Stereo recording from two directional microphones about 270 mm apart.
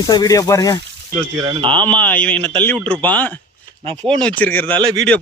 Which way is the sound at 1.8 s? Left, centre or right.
Centre.